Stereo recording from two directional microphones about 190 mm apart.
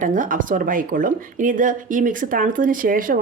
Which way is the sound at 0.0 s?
45° right (ahead or behind).